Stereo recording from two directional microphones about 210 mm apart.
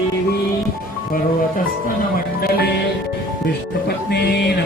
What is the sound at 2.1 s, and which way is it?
Music, 45° left (ahead or behind).